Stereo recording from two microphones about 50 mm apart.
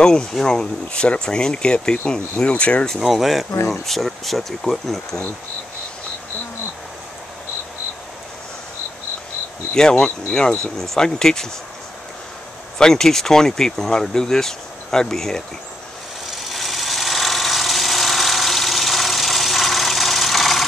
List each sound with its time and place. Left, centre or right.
0.0 s speech: centre
3.0 s speech: centre
9.8 s speech: centre
12.7 s speech: centre
16.3 s tools: centre